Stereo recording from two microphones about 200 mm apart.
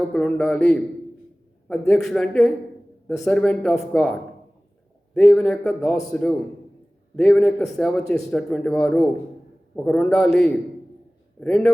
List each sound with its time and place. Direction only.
0.1 s a man's voice: 5° left (ahead or behind)